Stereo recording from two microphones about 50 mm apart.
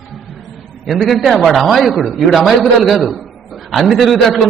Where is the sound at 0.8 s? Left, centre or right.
Centre.